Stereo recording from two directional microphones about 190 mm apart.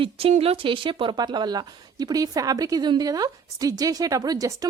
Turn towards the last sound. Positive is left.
turn(degrees=-20)  # may be behind; listen again after turning